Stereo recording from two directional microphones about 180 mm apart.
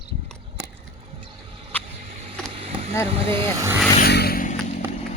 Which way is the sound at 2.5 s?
30° right (ahead or behind).